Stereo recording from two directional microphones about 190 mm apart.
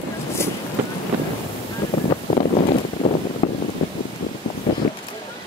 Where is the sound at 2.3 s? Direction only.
35° left (ahead or behind).